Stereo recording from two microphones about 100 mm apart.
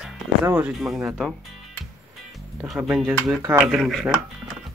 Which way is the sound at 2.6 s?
5° right (ahead or behind).